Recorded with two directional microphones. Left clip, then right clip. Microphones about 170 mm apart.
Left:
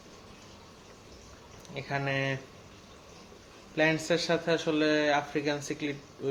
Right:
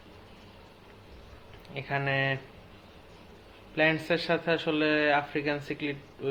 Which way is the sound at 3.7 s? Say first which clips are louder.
Right 1 dB; 10° left (ahead or behind).